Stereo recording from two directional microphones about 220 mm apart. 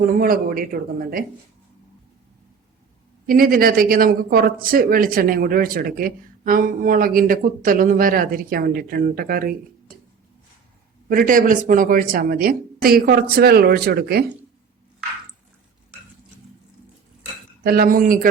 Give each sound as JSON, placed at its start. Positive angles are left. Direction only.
{"t": 0.0, "sound": "speech", "side_deg": -40}
{"t": 3.2, "sound": "speech", "side_deg": -40}
{"t": 11.1, "sound": "a woman's voice", "side_deg": -40}
{"t": 17.6, "sound": "speech", "side_deg": -45}